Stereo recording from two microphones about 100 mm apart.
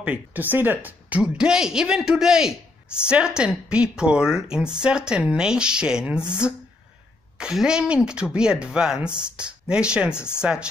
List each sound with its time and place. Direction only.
0.0 s speech: 15° right (ahead or behind)
1.2 s speech: 5° right (ahead or behind)
10.1 s speech: 25° left (ahead or behind)
10.4 s speech: 10° right (ahead or behind)